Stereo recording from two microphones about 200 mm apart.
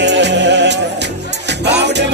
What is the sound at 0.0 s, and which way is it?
Music, 60° right (ahead or behind).